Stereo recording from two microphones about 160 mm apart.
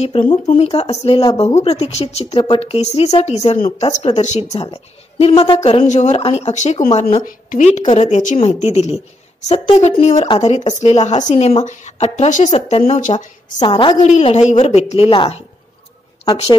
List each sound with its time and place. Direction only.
0.0 s speech: 35° left (ahead or behind)
7.2 s speech: 55° left (ahead or behind); by 10.4 s 35° left (ahead or behind)
10.4 s speech: 45° left (ahead or behind)
13.6 s a woman's voice: 30° left (ahead or behind)
14.0 s speech: 40° left (ahead or behind)